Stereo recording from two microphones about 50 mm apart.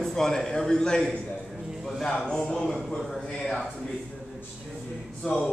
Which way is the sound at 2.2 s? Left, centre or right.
Centre.